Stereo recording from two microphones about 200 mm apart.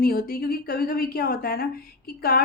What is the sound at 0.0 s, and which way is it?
A woman's voice, 50° left (ahead or behind).